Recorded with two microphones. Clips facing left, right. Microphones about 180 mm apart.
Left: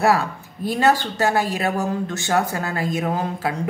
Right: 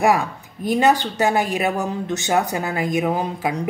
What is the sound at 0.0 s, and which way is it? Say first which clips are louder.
Speech: right 1 dB; 15° right (ahead or behind).